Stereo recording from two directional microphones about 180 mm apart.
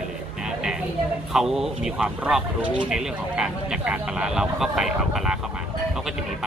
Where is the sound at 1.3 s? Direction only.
Centre (ahead or behind).